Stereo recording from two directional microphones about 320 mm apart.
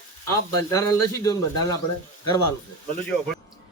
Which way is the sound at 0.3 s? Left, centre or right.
Centre.